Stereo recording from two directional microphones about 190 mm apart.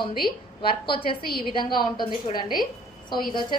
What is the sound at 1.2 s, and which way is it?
Speech, 50° left (ahead or behind).